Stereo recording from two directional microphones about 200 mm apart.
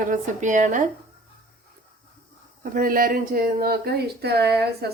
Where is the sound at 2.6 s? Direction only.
45° right (ahead or behind).